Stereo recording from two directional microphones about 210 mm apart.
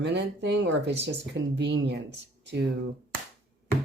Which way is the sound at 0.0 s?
55° right (ahead or behind).